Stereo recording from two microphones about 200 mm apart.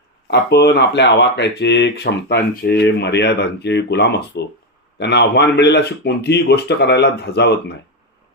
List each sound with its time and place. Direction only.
0.3 s speech: 55° left (ahead or behind)